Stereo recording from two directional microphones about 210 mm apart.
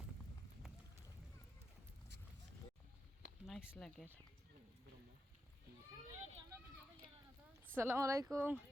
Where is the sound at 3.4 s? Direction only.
Centre (ahead or behind).